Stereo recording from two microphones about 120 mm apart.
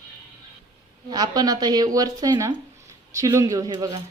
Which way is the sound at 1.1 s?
30° right (ahead or behind).